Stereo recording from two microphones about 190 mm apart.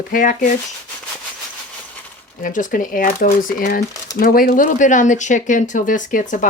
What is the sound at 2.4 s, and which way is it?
Speech, 45° left (ahead or behind).